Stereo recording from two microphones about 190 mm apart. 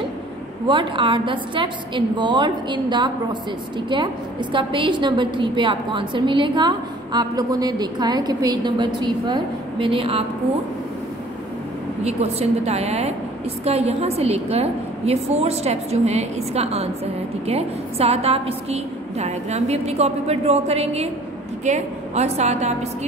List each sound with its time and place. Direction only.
0.7 s a woman's voice: 25° right (ahead or behind)
12.0 s a woman's voice: 35° right (ahead or behind)